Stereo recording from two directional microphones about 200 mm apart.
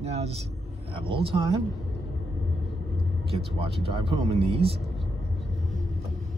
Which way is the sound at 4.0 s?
30° right (ahead or behind).